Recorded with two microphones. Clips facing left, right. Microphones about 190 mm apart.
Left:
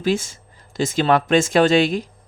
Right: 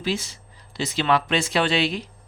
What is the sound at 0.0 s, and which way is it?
Speech, 50° left (ahead or behind).